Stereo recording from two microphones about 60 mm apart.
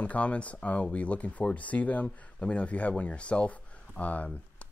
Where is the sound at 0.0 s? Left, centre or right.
Left.